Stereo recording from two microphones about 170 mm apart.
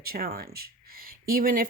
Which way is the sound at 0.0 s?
65° right (ahead or behind).